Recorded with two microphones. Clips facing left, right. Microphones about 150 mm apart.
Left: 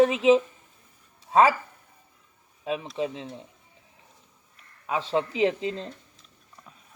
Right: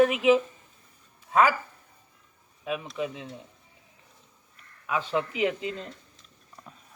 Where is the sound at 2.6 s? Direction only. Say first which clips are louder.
Left 2 dB; 25° left (ahead or behind).